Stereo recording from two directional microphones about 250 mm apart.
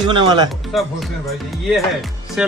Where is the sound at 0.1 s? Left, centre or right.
Centre.